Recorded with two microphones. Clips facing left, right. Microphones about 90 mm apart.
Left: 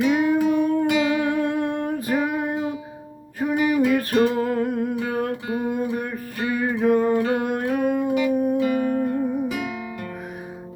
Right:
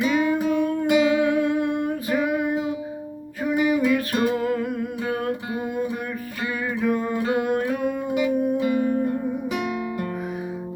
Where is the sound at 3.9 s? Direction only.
45° left (ahead or behind).